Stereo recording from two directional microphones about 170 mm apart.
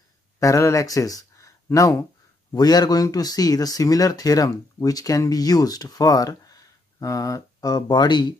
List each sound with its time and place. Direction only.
0.4 s speech: 20° left (ahead or behind)